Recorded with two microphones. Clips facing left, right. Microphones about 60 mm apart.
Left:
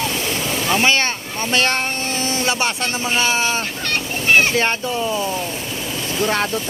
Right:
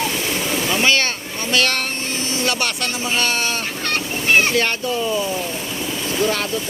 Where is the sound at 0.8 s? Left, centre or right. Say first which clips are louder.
Even; left.